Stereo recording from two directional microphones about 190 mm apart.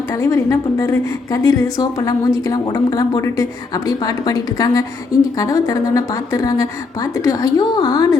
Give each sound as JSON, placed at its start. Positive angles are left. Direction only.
{"t": 0.1, "sound": "a woman's voice", "side_deg": 15}